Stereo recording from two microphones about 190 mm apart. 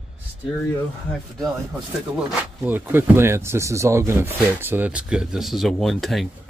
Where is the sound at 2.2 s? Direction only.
10° right (ahead or behind).